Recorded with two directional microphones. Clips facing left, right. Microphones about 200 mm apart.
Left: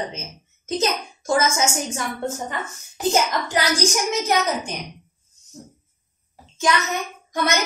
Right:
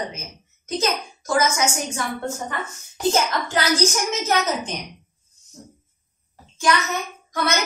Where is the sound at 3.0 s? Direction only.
15° left (ahead or behind).